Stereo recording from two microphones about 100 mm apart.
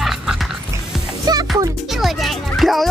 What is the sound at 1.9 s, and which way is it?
Music, centre (ahead or behind).